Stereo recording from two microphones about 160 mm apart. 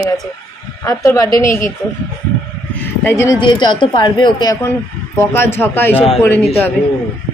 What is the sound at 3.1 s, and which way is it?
Speech, 15° left (ahead or behind).